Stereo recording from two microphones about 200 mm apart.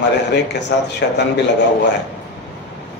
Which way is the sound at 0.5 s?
60° left (ahead or behind).